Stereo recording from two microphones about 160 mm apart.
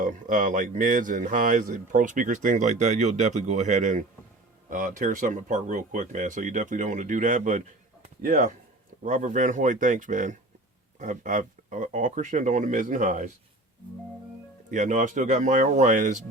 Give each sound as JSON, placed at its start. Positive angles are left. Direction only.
{"t": 0.0, "sound": "speech", "side_deg": -55}
{"t": 14.7, "sound": "speech", "side_deg": -50}